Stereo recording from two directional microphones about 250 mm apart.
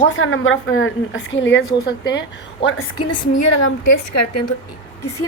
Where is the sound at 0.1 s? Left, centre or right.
Left.